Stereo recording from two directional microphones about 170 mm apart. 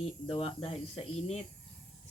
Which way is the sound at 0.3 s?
35° left (ahead or behind).